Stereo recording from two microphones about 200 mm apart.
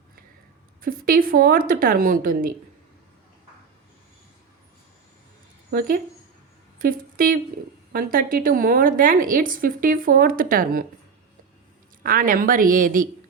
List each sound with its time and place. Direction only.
0.8 s a woman's voice: 45° right (ahead or behind)
6.7 s a woman's voice: 45° right (ahead or behind)
12.0 s a woman's voice: 45° right (ahead or behind)